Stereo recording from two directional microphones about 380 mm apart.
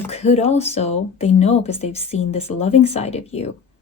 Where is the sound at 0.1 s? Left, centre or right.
Centre.